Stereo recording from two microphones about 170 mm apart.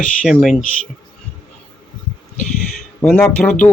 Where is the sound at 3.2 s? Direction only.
10° left (ahead or behind).